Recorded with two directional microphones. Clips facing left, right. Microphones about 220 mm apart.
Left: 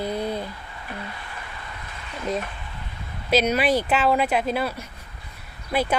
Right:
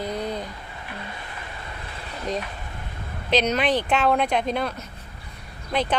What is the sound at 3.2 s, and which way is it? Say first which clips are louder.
Speech: left 1 dB; 10° left (ahead or behind).